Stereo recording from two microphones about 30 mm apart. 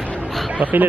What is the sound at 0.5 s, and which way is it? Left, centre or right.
Speech, right.